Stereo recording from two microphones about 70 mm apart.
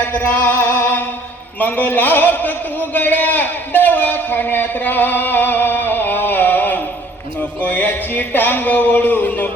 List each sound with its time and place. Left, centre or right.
0.1 s music: left
1.5 s a man's voice: left
7.6 s a sound: left